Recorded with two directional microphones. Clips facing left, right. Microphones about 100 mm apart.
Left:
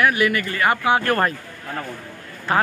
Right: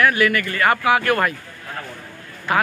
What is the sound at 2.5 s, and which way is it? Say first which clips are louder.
Speech: even; 30° left (ahead or behind).